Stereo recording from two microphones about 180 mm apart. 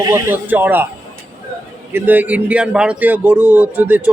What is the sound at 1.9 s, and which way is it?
A man's voice, 10° right (ahead or behind).